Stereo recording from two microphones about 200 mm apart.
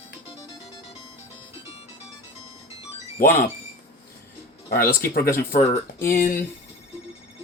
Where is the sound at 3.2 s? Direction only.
45° left (ahead or behind).